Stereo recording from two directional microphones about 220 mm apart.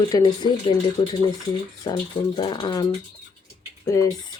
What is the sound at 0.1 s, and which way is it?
Speech, 15° left (ahead or behind).